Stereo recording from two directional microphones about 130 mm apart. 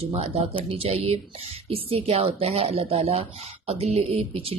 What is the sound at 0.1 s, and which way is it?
A woman's voice, 50° right (ahead or behind).